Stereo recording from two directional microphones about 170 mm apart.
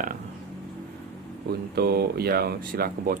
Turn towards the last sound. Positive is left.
turn(degrees=-60)  # may be behind; listen again after turning